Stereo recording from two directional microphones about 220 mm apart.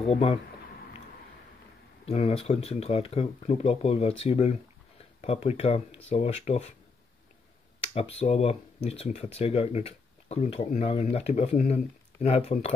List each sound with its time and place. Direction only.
0.0 s speech: 25° left (ahead or behind)
2.0 s speech: 25° left (ahead or behind)
7.8 s speech: 30° left (ahead or behind)